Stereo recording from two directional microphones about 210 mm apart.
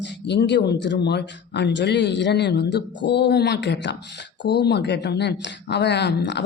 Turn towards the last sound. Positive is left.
turn(degrees=55)  # may be behind; listen again after turning